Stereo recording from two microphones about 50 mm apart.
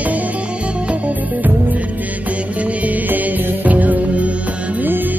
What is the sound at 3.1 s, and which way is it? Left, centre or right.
Music, right.